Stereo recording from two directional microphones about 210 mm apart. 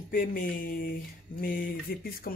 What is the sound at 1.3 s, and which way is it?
Speech, 45° left (ahead or behind).